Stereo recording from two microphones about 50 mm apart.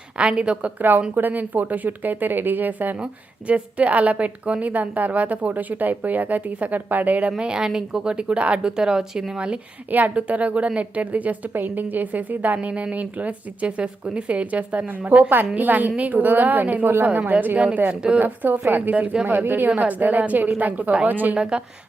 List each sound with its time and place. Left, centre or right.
0.2 s speech: centre
0.8 s a woman's voice: right
3.0 s a woman's voice: right
7.3 s speech: centre
9.9 s a woman's voice: right
12.5 s a woman's voice: right
17.8 s speech: centre
18.2 s a woman's voice: right
19.5 s a woman's voice: right
21.3 s speech: centre